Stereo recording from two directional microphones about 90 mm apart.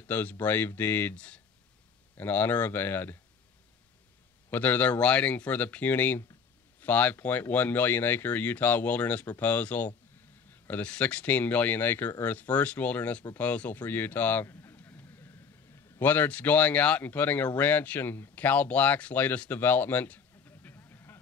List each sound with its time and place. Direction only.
0.0 s speech: 20° left (ahead or behind)
4.5 s a man's voice: 20° left (ahead or behind)